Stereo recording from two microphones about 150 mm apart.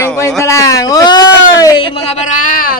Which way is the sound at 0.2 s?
20° left (ahead or behind).